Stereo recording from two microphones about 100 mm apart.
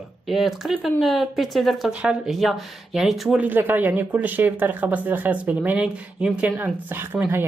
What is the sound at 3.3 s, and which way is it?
Speech, 15° right (ahead or behind).